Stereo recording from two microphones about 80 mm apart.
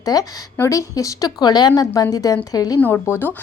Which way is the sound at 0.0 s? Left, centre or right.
Left.